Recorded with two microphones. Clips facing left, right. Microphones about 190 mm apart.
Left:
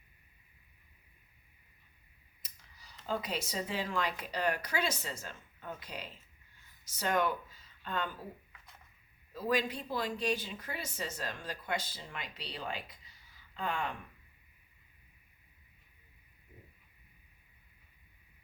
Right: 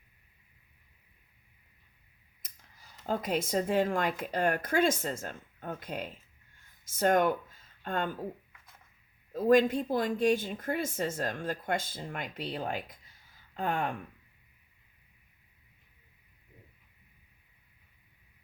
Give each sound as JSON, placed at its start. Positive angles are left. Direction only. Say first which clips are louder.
{"t": 2.4, "sound": "speech", "louder": "right 2 dB", "side_deg": -50}
{"t": 9.3, "sound": "speech", "louder": "right 9 dB", "side_deg": -50}